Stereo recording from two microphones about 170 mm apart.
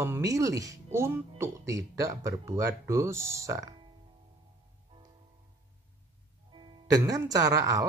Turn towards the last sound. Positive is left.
turn(degrees=-20)  # may be behind; listen again after turning